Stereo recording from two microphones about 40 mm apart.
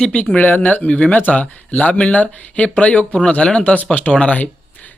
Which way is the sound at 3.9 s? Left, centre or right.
Left.